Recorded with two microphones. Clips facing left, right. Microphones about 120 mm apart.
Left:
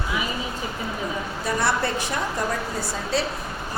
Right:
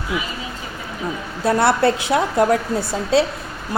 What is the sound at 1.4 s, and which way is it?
A woman's voice, 70° right (ahead or behind).